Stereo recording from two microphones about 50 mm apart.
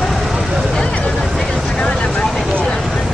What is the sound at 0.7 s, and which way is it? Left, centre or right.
Vehicle, left.